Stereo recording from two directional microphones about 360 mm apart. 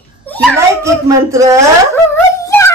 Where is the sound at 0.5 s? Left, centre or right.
Centre.